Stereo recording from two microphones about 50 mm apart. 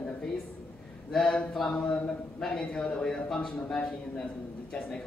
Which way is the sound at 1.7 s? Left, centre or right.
Left.